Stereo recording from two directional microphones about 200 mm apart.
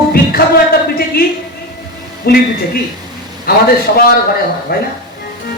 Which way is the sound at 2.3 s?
50° left (ahead or behind).